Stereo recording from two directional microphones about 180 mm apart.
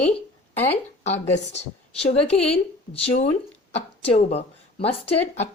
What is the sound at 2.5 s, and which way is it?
A woman's voice, 35° left (ahead or behind).